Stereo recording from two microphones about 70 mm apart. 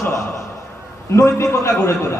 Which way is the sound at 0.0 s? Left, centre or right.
Left.